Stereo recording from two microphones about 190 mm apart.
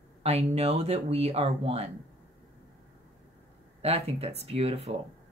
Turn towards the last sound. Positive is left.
turn(degrees=-30)  # may be behind; listen again after turning